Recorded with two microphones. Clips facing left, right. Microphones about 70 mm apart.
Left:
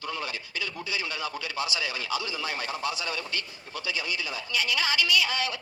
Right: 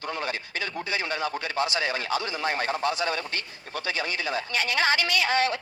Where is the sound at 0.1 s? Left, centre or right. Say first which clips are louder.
Right 4 dB; right.